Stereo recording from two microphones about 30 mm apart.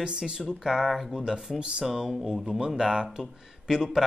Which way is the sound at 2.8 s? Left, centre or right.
Right.